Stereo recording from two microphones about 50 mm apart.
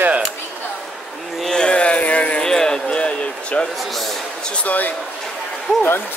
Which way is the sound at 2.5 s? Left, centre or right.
Centre.